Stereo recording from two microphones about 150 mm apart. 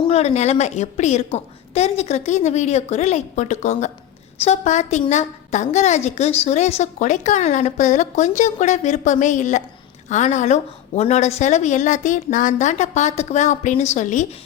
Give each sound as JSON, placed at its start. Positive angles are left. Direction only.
{"t": 0.1, "sound": "a woman's voice", "side_deg": 45}